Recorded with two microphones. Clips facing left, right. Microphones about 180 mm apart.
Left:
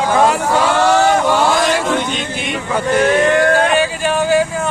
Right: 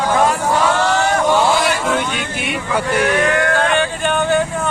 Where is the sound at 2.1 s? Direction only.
10° right (ahead or behind).